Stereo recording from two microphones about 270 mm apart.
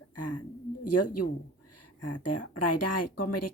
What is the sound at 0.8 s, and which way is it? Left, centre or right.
Speech, left.